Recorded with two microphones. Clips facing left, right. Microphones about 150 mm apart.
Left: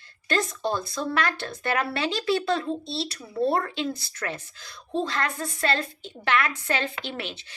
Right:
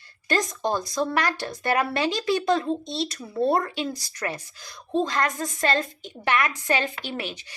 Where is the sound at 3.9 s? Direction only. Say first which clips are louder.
Left 1 dB; 35° right (ahead or behind).